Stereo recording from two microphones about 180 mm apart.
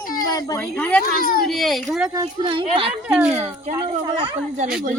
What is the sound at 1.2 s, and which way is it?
Speech, 50° left (ahead or behind).